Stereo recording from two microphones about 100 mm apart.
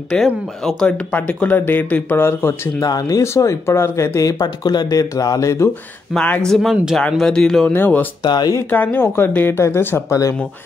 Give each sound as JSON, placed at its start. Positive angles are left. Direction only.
{"t": 0.1, "sound": "speech", "side_deg": 10}
{"t": 2.8, "sound": "speech", "side_deg": 40}
{"t": 6.1, "sound": "speech", "side_deg": 10}
{"t": 7.7, "sound": "speech", "side_deg": 20}
{"t": 8.2, "sound": "speech", "side_deg": 45}
{"t": 8.6, "sound": "speech", "side_deg": 20}